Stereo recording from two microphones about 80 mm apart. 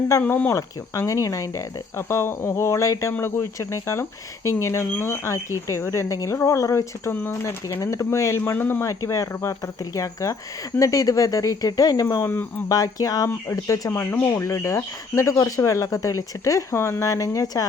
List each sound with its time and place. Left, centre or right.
0.2 s speech: left
0.5 s speech: left
3.1 s speech: left
8.5 s speech: left
8.8 s speech: left
12.2 s speech: left
12.6 s speech: left
13.9 s speech: left